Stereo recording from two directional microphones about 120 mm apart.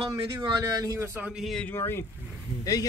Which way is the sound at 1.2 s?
5° right (ahead or behind).